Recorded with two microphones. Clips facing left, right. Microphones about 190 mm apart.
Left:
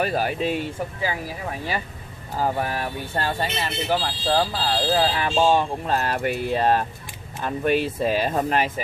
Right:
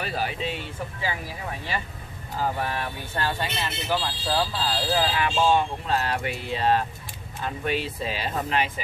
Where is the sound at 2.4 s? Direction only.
40° left (ahead or behind).